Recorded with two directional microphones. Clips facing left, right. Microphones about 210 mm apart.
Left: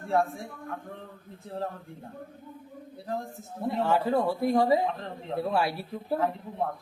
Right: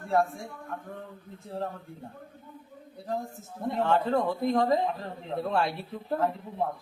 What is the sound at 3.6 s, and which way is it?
A man's voice, 5° left (ahead or behind).